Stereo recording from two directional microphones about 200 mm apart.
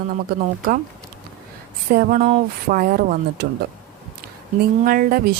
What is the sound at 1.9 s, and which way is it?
A woman's voice, 45° right (ahead or behind).